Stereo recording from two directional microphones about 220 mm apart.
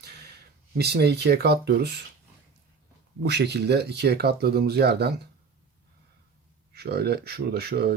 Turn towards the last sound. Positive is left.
turn(degrees=-45)  # may be behind; listen again after turning